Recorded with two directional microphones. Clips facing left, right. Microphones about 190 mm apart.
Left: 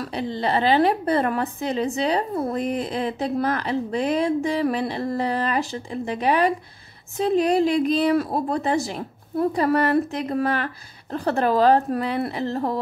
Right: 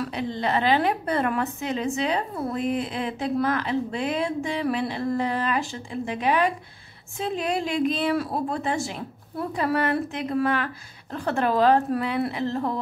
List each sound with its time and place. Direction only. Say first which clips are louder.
0.0 s a woman's voice: left 2 dB; 35° left (ahead or behind)